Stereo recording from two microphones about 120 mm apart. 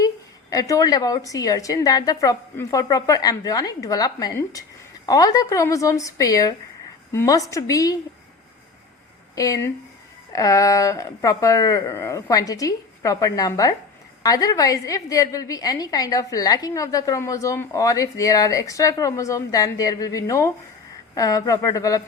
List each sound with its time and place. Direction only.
0.5 s a woman's voice: 30° left (ahead or behind)
9.3 s a woman's voice: 30° left (ahead or behind)